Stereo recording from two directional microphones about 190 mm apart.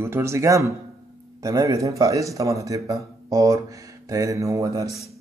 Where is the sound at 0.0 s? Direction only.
15° right (ahead or behind).